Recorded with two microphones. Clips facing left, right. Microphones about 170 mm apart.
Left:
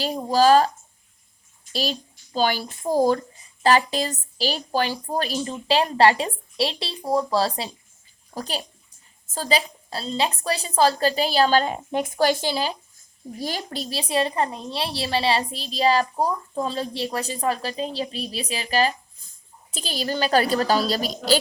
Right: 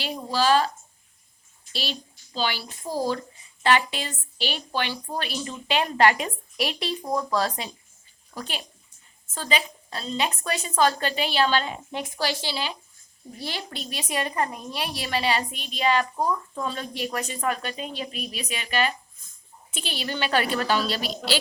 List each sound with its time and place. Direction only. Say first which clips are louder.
0.0 s speech: left 6 dB; 40° left (ahead or behind)
1.7 s a child's voice: left 6 dB; 40° left (ahead or behind)